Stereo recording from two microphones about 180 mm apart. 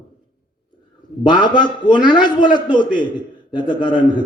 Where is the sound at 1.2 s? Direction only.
25° left (ahead or behind).